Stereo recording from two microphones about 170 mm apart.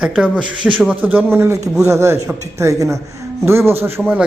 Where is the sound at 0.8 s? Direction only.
10° right (ahead or behind).